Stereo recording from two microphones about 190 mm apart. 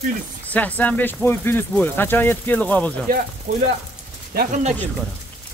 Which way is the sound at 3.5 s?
40° right (ahead or behind).